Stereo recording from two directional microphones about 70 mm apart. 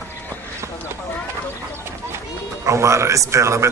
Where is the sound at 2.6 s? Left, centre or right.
Right.